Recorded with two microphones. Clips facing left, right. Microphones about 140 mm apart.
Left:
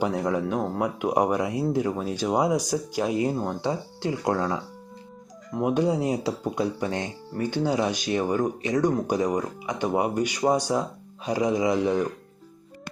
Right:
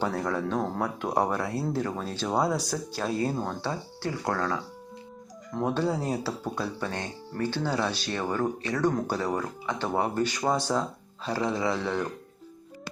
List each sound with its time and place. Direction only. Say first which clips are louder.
0.0 s speech: left 3 dB; 15° left (ahead or behind)